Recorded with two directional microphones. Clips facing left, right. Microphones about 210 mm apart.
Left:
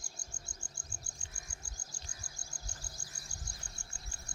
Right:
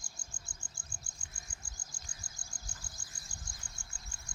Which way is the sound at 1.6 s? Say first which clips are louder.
Left 2 dB; 40° left (ahead or behind).